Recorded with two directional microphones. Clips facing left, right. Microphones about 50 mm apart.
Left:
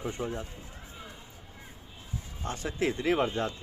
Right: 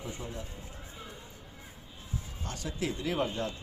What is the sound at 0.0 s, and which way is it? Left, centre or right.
Speech, left.